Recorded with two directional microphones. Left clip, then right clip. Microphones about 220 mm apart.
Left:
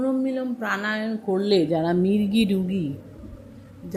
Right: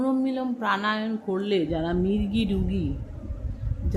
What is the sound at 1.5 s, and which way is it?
Speech, 15° left (ahead or behind).